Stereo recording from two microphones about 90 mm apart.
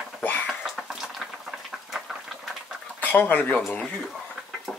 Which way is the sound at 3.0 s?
20° left (ahead or behind).